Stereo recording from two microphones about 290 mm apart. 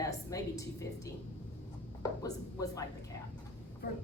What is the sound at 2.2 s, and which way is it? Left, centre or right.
Speech, centre.